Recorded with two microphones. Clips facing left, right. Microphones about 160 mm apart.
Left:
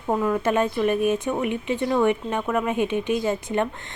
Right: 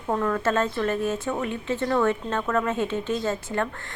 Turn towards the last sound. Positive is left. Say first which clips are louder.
# left 3 dB
turn(degrees=15)  # may be behind; listen again after turning